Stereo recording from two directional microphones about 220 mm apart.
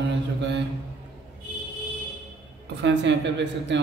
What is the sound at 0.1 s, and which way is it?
Mantra, 50° right (ahead or behind).